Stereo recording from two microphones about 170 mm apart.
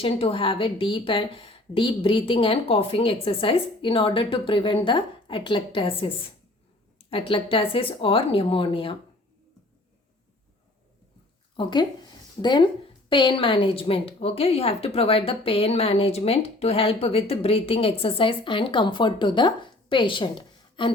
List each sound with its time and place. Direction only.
0.0 s a woman's voice: 35° left (ahead or behind)
11.5 s a woman's voice: 25° left (ahead or behind)